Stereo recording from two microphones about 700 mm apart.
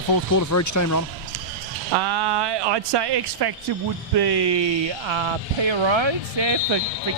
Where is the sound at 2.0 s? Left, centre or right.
Right.